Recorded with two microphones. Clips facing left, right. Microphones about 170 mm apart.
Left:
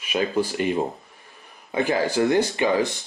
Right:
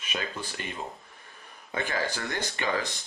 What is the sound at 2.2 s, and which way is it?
Speech, 20° left (ahead or behind).